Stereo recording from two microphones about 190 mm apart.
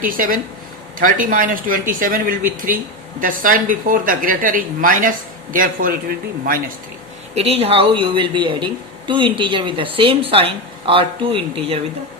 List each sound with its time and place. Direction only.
0.0 s speech: 45° right (ahead or behind)
7.3 s speech: 30° right (ahead or behind)